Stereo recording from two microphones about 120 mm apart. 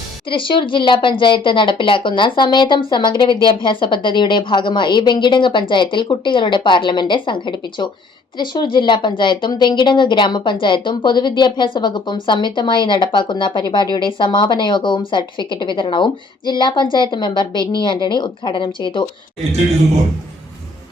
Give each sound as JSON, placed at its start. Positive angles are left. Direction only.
{"t": 0.3, "sound": "a woman's voice", "side_deg": 45}